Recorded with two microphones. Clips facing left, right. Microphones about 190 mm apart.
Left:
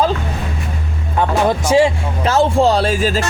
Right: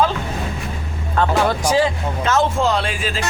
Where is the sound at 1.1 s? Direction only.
15° left (ahead or behind); by 3.2 s 40° left (ahead or behind).